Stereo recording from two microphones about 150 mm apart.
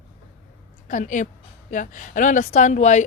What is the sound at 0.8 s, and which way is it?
A woman's voice, 60° left (ahead or behind).